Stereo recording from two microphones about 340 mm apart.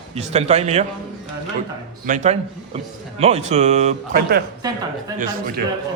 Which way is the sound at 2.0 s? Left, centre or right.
Right.